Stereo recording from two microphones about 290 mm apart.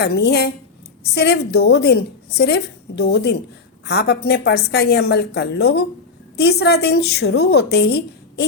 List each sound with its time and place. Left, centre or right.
0.0 s a woman's voice: left